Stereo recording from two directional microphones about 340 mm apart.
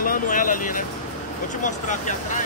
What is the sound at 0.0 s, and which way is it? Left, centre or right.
Vehicle, left.